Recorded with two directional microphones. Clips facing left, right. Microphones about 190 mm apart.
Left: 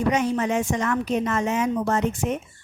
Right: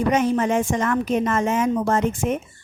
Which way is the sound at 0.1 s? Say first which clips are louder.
Right 4 dB; 50° right (ahead or behind).